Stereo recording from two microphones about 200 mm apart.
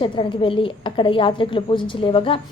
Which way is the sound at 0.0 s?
25° left (ahead or behind).